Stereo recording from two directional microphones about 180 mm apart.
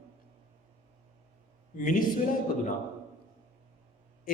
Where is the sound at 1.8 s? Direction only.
50° left (ahead or behind).